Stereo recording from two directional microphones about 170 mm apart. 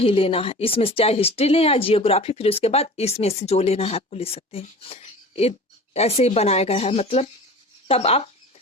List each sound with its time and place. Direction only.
0.0 s speech: 35° left (ahead or behind)